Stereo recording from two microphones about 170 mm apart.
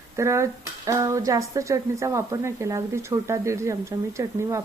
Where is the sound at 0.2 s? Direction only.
15° right (ahead or behind).